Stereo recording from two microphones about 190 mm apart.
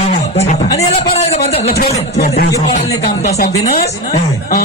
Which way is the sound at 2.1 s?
55° left (ahead or behind).